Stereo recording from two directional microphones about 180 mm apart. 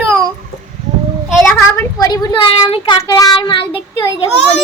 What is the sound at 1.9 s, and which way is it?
Speech, 20° left (ahead or behind).